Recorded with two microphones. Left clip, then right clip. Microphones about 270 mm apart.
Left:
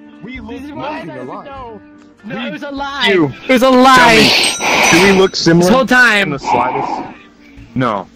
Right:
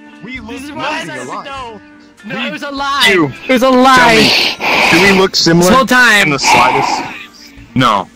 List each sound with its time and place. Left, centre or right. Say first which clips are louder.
0.3 s a man's voice: right 3 dB; right
2.2 s a man's voice: right 4 dB; right
3.4 s speech: even; centre
6.3 s a man's voice: right 6 dB; right